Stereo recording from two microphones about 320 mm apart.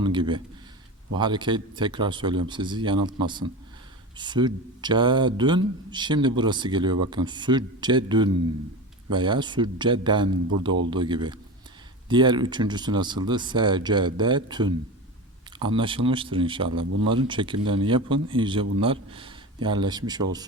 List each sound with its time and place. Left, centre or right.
0.0 s speech: centre